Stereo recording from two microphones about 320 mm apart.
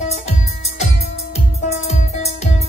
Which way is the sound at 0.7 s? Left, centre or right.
Centre.